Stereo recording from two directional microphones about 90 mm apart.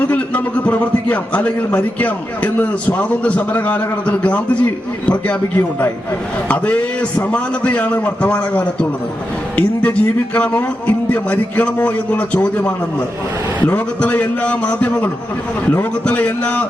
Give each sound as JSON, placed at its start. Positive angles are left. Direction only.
{"t": 0.0, "sound": "a man's voice", "side_deg": 20}